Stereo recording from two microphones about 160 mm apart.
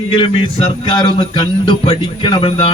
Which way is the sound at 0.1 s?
35° left (ahead or behind).